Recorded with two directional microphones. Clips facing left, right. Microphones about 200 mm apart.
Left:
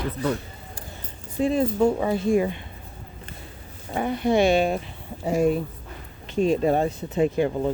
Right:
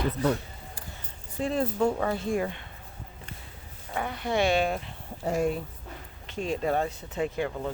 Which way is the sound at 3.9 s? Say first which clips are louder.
Left 8 dB; 20° left (ahead or behind).